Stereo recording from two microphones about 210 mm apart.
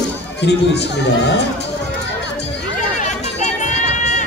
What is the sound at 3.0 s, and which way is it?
Chatter, 35° left (ahead or behind).